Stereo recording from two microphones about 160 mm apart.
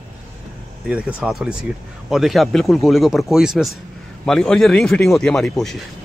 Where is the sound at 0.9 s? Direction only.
5° right (ahead or behind).